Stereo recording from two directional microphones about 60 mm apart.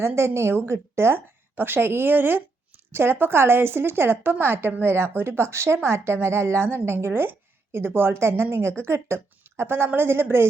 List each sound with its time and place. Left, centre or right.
0.0 s a woman's voice: right